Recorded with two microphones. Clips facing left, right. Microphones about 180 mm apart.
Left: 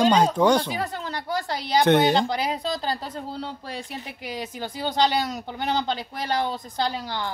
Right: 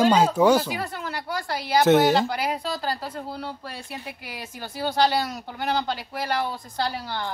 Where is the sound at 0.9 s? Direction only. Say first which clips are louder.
Left 1 dB; 20° left (ahead or behind).